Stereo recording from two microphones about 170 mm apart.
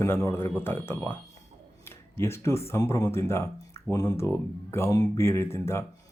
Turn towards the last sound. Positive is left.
turn(degrees=15)  # may be behind; listen again after turning